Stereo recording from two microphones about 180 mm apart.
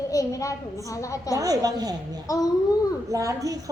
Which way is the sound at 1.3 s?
20° right (ahead or behind).